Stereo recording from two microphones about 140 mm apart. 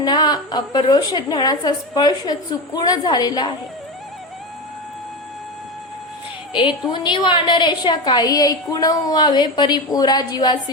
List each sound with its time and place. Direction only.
0.0 s a woman's voice: 30° left (ahead or behind)
6.5 s a woman's voice: 35° left (ahead or behind)